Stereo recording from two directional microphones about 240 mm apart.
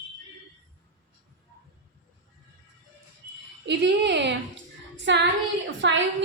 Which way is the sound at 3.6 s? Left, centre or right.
Right.